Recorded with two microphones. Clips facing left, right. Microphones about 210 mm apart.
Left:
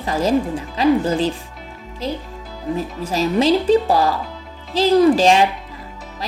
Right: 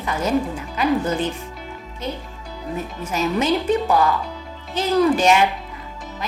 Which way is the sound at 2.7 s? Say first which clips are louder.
Left 2 dB; 35° left (ahead or behind).